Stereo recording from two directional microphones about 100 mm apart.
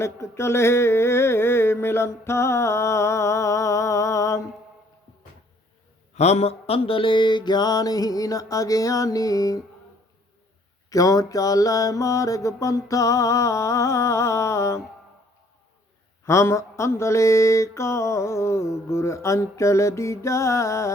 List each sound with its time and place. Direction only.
0.0 s a sound: 25° left (ahead or behind)
6.1 s mantra: 90° left; by 9.6 s 35° left (ahead or behind)
10.8 s mantra: 35° left (ahead or behind)
16.2 s music: 30° left (ahead or behind)